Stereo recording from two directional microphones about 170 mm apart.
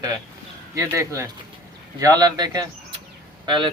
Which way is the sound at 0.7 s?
15° right (ahead or behind).